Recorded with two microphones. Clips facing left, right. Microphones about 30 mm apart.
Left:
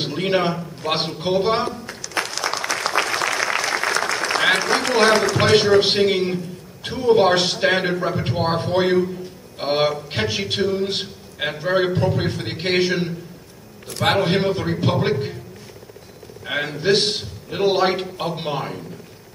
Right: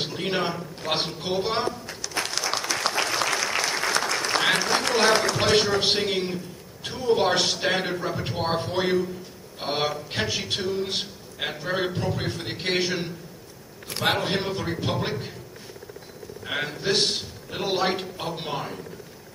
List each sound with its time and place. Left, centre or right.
0.0 s a man's voice: centre
2.2 s applause: left
3.0 s applause: centre
5.3 s a man's voice: centre
16.4 s a man's voice: centre